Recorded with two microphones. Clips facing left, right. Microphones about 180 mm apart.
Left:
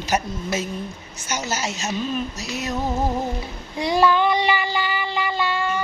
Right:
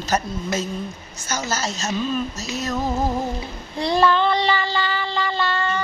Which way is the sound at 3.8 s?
10° left (ahead or behind).